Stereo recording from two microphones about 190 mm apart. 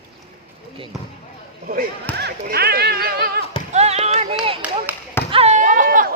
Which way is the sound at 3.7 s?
35° right (ahead or behind).